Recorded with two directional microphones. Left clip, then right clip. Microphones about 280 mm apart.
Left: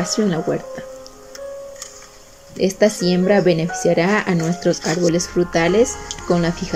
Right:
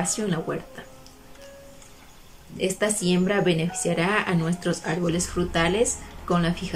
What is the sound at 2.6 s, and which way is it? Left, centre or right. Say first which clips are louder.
Speech: left 9 dB; left.